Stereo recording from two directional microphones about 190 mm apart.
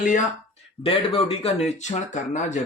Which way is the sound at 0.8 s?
30° left (ahead or behind).